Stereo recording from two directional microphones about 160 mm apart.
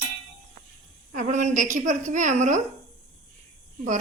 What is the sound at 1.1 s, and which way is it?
A woman's voice, 45° right (ahead or behind).